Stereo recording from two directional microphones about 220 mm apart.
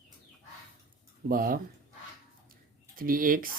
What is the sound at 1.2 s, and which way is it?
Speech, 40° right (ahead or behind).